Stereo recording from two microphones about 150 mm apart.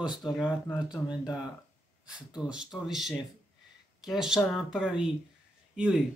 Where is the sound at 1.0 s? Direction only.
25° left (ahead or behind).